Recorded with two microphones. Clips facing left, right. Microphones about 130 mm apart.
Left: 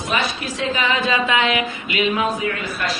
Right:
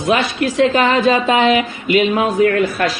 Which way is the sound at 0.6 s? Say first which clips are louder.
Right 8 dB; 50° right (ahead or behind).